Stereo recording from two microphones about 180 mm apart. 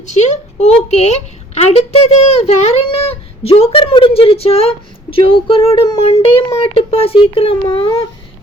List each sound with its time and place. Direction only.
0.0 s speech: 40° left (ahead or behind)